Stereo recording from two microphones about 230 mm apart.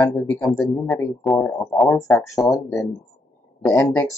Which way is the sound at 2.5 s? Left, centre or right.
Centre.